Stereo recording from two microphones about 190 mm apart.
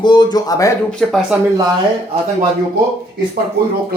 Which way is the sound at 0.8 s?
Centre (ahead or behind).